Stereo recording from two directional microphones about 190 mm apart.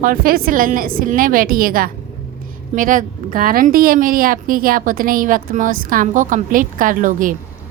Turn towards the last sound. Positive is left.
turn(degrees=-45)  # may be behind; listen again after turning